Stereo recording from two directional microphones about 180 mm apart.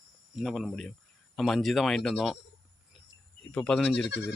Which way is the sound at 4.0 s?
75° left (ahead or behind).